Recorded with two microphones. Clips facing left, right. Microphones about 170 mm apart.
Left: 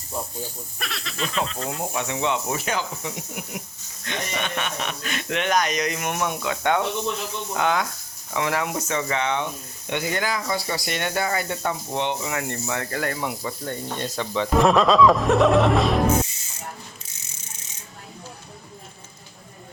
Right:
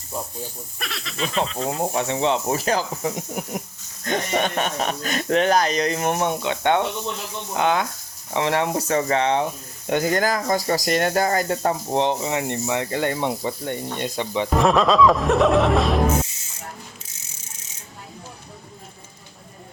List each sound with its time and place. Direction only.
0.8 s speech: centre (ahead or behind)
1.8 s speech: 35° right (ahead or behind)
14.0 s speech: 15° right (ahead or behind)
14.6 s speech: centre (ahead or behind)